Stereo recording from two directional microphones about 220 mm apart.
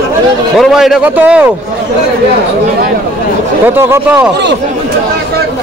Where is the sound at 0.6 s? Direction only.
Centre (ahead or behind).